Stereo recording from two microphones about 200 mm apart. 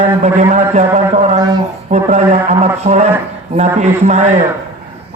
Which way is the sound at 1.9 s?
35° right (ahead or behind).